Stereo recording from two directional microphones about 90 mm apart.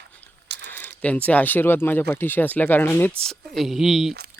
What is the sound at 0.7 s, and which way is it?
Speech, 20° left (ahead or behind).